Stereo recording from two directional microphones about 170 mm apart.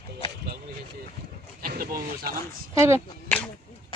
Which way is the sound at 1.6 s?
60° right (ahead or behind).